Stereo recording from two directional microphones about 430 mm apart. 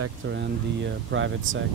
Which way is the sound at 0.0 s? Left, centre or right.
Right.